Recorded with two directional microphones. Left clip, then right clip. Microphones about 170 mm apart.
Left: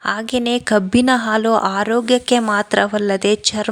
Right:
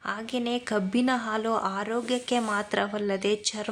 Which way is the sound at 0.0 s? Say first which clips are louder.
Left 11 dB; 45° left (ahead or behind).